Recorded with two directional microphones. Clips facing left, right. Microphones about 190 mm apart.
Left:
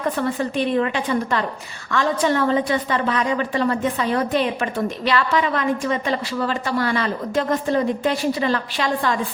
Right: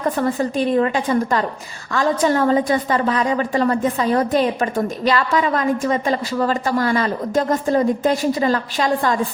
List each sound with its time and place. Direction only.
0.2 s a woman's voice: 40° right (ahead or behind)